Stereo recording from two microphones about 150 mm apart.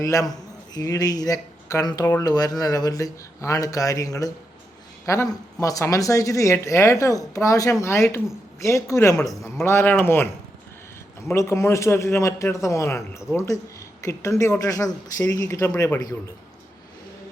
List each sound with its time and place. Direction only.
0.0 s a man's voice: 20° left (ahead or behind)
11.3 s a woman's voice: 20° left (ahead or behind)